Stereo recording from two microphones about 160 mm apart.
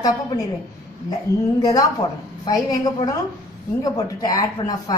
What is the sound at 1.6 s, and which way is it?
A woman's voice, 25° left (ahead or behind).